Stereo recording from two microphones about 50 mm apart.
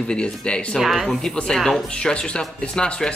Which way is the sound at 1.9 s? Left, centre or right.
Centre.